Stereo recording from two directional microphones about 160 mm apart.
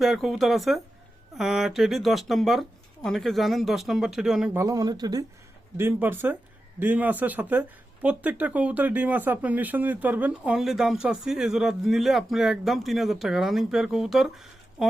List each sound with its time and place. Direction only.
0.0 s speech: centre (ahead or behind)
4.5 s speech: 20° right (ahead or behind)
5.7 s speech: 15° right (ahead or behind)